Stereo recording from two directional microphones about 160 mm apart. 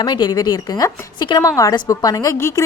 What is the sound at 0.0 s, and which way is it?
Speech, 25° left (ahead or behind).